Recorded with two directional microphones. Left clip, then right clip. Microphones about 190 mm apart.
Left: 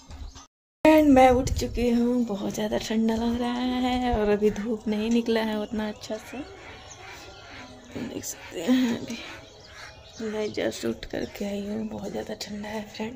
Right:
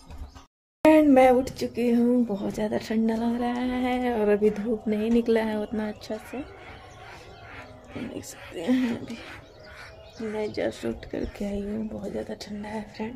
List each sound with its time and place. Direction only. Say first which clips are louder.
0.8 s speech: even; centre (ahead or behind)
8.1 s speech: left 2 dB; 10° left (ahead or behind)
10.3 s speech: even; 5° left (ahead or behind)